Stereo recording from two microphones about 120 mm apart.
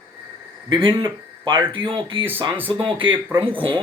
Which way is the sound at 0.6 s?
40° right (ahead or behind).